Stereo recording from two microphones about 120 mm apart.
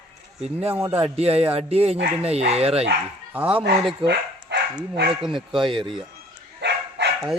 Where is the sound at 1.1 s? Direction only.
60° right (ahead or behind).